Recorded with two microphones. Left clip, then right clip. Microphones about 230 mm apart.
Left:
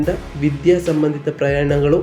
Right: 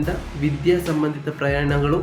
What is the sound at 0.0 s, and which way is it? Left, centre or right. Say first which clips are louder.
Speech: left 5 dB; centre.